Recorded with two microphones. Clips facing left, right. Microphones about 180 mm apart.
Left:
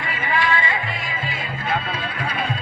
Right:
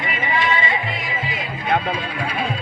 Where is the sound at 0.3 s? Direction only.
20° right (ahead or behind).